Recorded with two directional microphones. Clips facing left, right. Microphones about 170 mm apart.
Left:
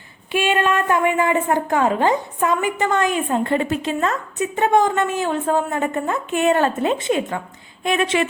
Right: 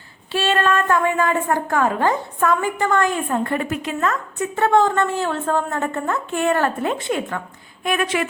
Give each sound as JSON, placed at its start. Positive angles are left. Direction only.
{"t": 0.3, "sound": "a woman's voice", "side_deg": 15}